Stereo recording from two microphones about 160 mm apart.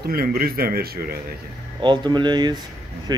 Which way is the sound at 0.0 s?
70° right (ahead or behind).